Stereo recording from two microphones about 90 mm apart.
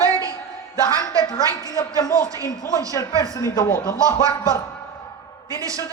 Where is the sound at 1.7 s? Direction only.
45° left (ahead or behind).